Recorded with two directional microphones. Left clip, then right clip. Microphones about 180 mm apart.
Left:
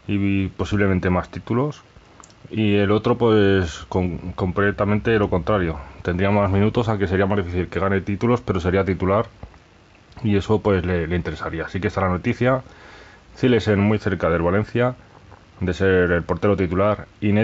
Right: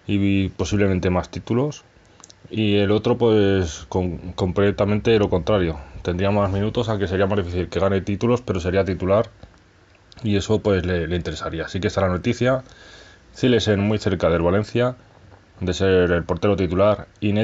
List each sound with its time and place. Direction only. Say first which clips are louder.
0.0 s speech: right 1 dB; centre (ahead or behind); by 4.1 s 20° left (ahead or behind)
4.4 s speech: right 1 dB; centre (ahead or behind); by 9.1 s 20° left (ahead or behind)
10.2 s speech: left 1 dB; 15° left (ahead or behind)